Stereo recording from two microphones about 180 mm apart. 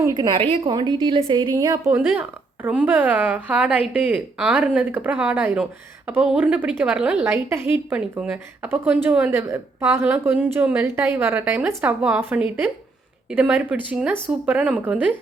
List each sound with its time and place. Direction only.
0.0 s a woman's voice: 20° right (ahead or behind)